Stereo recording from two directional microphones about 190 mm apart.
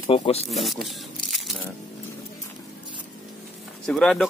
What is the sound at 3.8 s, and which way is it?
Speech, 5° left (ahead or behind).